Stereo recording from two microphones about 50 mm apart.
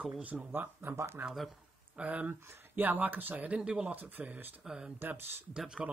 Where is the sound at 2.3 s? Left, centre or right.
Right.